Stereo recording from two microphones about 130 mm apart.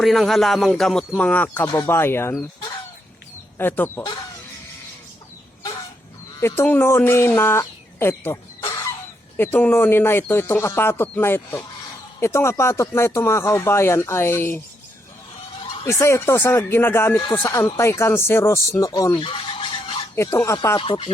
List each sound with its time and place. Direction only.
0.0 s speech: centre (ahead or behind); by 2.3 s 20° left (ahead or behind)
3.6 s speech: 15° left (ahead or behind)
6.4 s speech: 15° left (ahead or behind)
15.9 s speech: 20° left (ahead or behind)
19.2 s toothbrush: 40° left (ahead or behind)
20.1 s speech: 20° left (ahead or behind)
20.7 s speech: 45° left (ahead or behind)